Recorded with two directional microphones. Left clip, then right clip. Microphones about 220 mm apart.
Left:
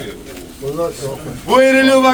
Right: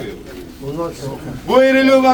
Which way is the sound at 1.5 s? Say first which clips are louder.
Left 1 dB; 10° right (ahead or behind).